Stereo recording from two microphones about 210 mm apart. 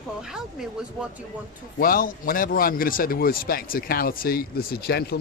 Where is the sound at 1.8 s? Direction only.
40° left (ahead or behind).